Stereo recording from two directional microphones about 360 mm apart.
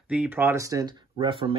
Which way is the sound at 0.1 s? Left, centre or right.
Centre.